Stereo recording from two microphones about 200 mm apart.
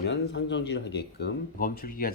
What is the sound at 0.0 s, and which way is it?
Speech, 60° left (ahead or behind).